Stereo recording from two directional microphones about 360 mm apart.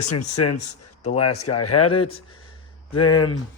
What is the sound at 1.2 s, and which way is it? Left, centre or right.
Speech, left.